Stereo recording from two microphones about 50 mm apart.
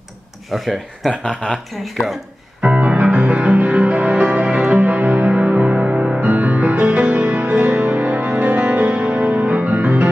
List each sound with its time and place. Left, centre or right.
0.5 s speech: centre
2.6 s music: right
6.2 s music: right